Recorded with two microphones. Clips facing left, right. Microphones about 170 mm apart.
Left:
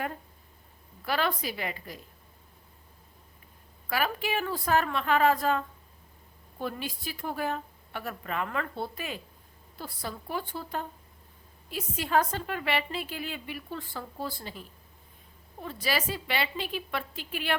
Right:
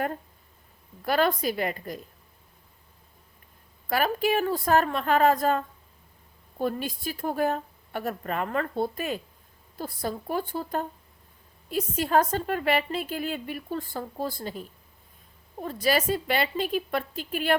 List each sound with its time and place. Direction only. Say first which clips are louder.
1.0 s a woman's voice: right 6 dB; 45° right (ahead or behind)
3.8 s a woman's voice: right 5 dB; 45° right (ahead or behind)